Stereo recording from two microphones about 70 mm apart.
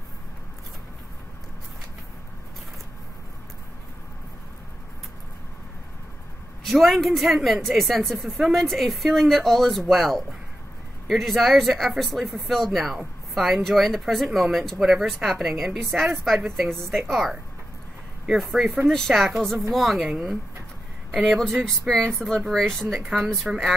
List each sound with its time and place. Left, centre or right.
6.6 s speech: centre
21.1 s speech: centre
22.9 s speech: centre